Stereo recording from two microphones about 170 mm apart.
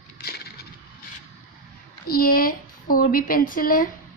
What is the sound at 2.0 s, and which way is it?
A woman's voice, 60° left (ahead or behind).